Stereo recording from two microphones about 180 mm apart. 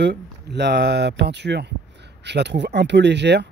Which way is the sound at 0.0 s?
70° right (ahead or behind).